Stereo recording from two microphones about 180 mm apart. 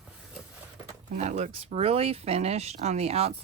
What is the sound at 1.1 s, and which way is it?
Speech, 40° right (ahead or behind).